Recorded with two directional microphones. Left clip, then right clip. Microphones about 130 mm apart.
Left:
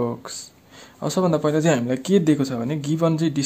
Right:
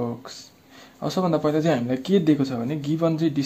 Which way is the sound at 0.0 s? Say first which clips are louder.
Left 4 dB; 50° left (ahead or behind).